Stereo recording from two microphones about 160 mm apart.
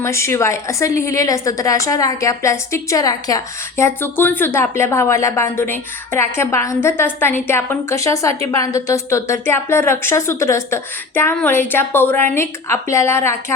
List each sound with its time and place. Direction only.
0.0 s a woman's voice: 15° left (ahead or behind)